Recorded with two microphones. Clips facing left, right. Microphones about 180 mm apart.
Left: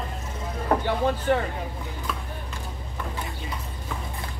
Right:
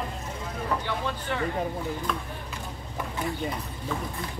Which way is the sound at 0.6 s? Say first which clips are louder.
Left 7 dB; 45° left (ahead or behind).